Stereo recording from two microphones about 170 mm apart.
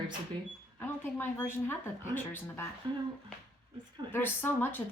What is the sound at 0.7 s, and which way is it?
Speech, 15° left (ahead or behind).